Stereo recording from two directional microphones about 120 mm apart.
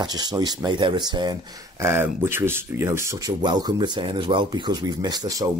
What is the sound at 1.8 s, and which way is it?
Speech, 20° right (ahead or behind).